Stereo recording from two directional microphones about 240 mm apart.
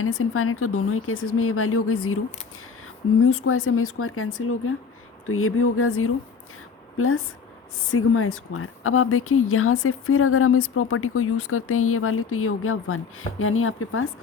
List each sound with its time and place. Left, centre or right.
0.0 s speech: left
3.2 s a woman's voice: left